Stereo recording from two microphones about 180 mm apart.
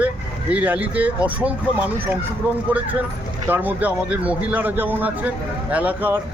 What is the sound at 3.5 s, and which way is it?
Speech, 10° right (ahead or behind).